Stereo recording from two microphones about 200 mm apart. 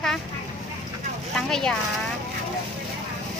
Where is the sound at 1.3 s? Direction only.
5° left (ahead or behind).